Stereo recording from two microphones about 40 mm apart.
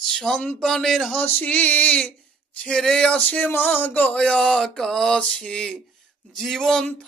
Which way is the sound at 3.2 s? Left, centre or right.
Left.